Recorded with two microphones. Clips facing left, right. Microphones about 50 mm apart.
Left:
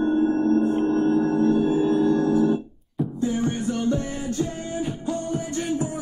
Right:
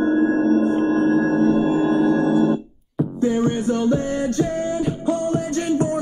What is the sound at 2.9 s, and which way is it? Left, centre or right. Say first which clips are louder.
Music: right 4 dB; centre.